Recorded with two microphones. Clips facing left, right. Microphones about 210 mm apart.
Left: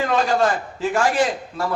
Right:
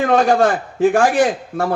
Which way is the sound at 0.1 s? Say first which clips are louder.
Right 7 dB; 50° right (ahead or behind).